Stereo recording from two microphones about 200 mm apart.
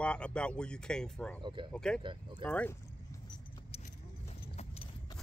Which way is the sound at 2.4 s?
5° left (ahead or behind).